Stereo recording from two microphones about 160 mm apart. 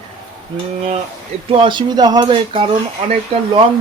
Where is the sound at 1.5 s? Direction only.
30° right (ahead or behind).